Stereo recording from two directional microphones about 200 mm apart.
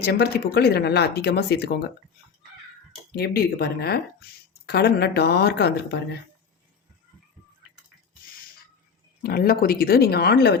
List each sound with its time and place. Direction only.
0.0 s speech: 55° left (ahead or behind)
3.1 s speech: 50° left (ahead or behind)
9.2 s speech: 50° left (ahead or behind)